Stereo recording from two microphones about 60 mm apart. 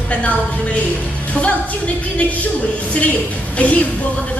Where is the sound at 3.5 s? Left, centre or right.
Left.